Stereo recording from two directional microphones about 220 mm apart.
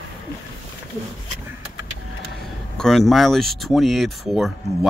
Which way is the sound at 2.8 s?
Centre (ahead or behind).